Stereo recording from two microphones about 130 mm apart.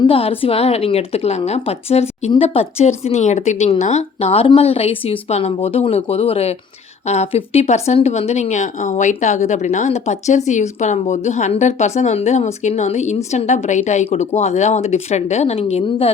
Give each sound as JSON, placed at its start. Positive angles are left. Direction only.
{"t": 0.1, "sound": "speech", "side_deg": 45}